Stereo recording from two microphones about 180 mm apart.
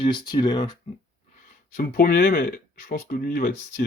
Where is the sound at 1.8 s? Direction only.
55° left (ahead or behind).